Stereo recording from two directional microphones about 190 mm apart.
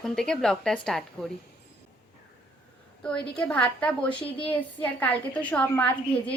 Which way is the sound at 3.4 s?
5° left (ahead or behind).